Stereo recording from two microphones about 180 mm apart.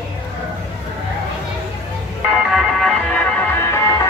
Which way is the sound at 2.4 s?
Centre (ahead or behind).